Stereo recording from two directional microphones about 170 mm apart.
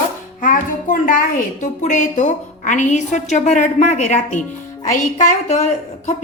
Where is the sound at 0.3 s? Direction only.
50° left (ahead or behind).